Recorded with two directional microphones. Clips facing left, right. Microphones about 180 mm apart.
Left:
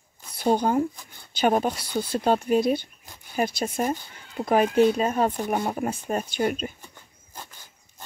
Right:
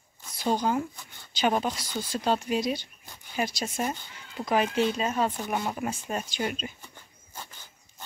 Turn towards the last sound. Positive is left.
turn(degrees=45)  # may be behind; listen again after turning